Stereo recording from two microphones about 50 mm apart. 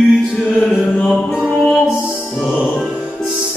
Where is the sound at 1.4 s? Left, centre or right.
Centre.